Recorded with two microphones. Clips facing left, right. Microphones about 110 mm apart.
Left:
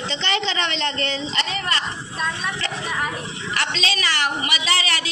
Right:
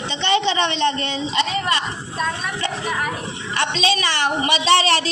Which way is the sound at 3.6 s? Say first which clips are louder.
Right 6 dB; 25° right (ahead or behind).